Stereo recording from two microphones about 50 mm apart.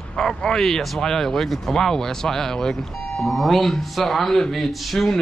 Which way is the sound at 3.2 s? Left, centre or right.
Centre.